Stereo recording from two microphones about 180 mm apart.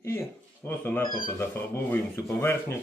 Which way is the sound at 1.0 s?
50° left (ahead or behind).